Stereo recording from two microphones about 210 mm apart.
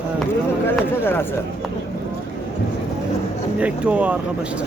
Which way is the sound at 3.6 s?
5° right (ahead or behind).